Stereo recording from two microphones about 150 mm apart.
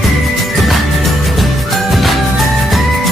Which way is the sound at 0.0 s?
Centre (ahead or behind).